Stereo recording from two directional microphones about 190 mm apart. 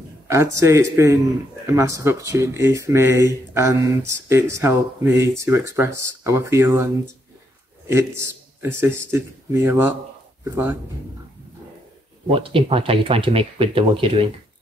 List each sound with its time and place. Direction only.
0.3 s a man's voice: 15° right (ahead or behind)
12.3 s speech: 30° right (ahead or behind)